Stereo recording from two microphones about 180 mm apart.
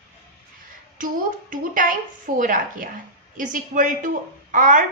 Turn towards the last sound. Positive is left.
turn(degrees=-50)  # may be behind; listen again after turning